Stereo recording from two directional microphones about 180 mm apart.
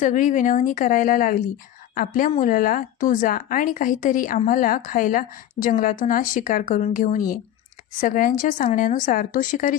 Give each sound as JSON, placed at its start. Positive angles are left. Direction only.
{"t": 0.0, "sound": "a woman's voice", "side_deg": 45}